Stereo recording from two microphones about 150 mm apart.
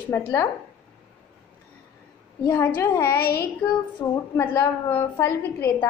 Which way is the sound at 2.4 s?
15° left (ahead or behind).